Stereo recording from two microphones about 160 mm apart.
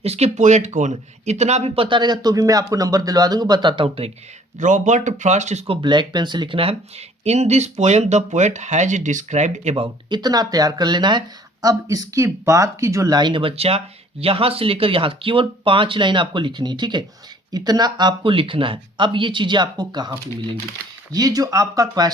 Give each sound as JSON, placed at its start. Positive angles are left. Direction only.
{"t": 0.0, "sound": "speech", "side_deg": -40}
{"t": 4.5, "sound": "speech", "side_deg": -50}